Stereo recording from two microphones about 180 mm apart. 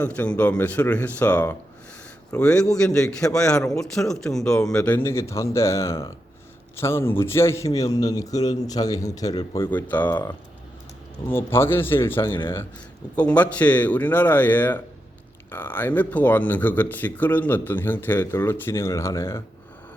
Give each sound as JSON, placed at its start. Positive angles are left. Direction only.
{"t": 0.0, "sound": "a man's voice", "side_deg": 5}
{"t": 9.7, "sound": "speech", "side_deg": 10}
{"t": 11.3, "sound": "speech", "side_deg": 15}